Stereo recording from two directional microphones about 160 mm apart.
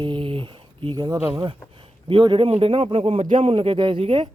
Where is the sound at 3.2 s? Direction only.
55° right (ahead or behind).